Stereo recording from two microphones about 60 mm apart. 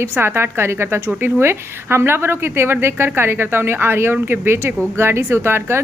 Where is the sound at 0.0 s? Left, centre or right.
Right.